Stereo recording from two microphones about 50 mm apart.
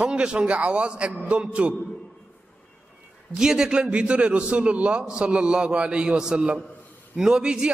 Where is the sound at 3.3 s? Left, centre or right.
Centre.